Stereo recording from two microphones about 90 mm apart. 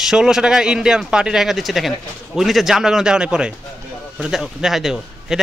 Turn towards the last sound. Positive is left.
turn(degrees=-5)  # may be behind; listen again after turning